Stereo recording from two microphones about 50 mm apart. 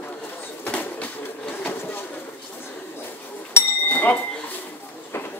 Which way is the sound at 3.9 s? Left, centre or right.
Left.